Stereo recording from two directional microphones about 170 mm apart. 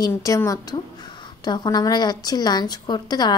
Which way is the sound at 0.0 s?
20° left (ahead or behind).